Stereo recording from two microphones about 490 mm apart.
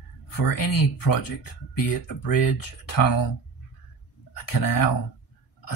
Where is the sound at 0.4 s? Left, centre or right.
Left.